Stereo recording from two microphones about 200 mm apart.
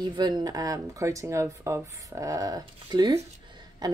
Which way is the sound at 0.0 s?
20° right (ahead or behind).